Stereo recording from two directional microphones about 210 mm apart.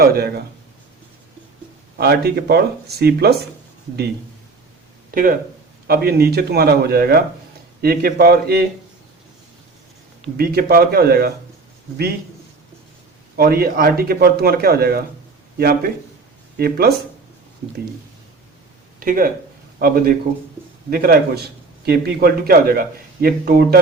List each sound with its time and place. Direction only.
0.0 s a man's voice: 45° right (ahead or behind)
2.0 s a man's voice: 50° right (ahead or behind)
5.1 s a man's voice: 40° right (ahead or behind)
10.3 s a man's voice: 45° right (ahead or behind)
13.3 s a man's voice: 45° right (ahead or behind)
18.9 s speech: 45° right (ahead or behind)
20.9 s a man's voice: 45° right (ahead or behind)